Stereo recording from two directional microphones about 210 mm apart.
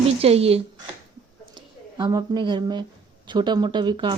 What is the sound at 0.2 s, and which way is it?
Speech, 30° right (ahead or behind).